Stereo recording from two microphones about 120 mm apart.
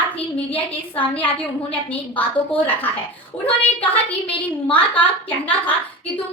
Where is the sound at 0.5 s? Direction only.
15° left (ahead or behind).